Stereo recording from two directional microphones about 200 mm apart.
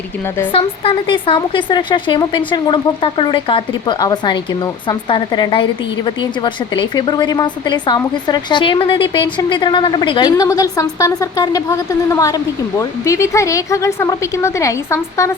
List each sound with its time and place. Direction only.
0.5 s a woman's voice: 25° left (ahead or behind)